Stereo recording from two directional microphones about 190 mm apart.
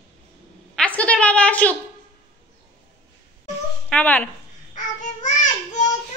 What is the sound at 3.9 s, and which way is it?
Speech, 10° left (ahead or behind).